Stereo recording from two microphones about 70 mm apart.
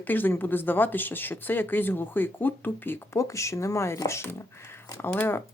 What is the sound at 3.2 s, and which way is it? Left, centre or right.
Speech, left.